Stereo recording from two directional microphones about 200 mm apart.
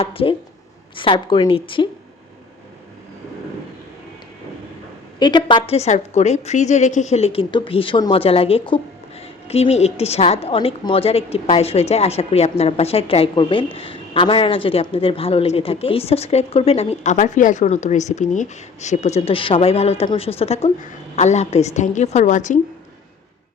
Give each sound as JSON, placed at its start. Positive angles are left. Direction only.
{"t": 0.0, "sound": "a woman's voice", "side_deg": 30}
{"t": 5.2, "sound": "a woman's voice", "side_deg": 25}